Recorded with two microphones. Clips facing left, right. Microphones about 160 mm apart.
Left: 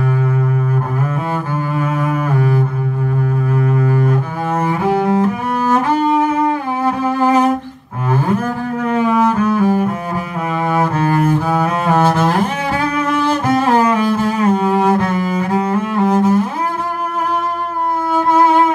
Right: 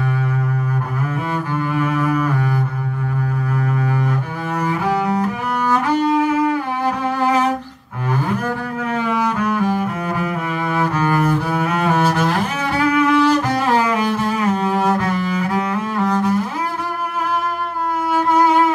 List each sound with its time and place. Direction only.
1.8 s double bass: 40° left (ahead or behind)
3.5 s double bass: 35° left (ahead or behind)
4.6 s cello: 40° left (ahead or behind)
8.9 s cello: 40° left (ahead or behind)
16.0 s cello: 25° left (ahead or behind)
18.3 s music: 35° left (ahead or behind)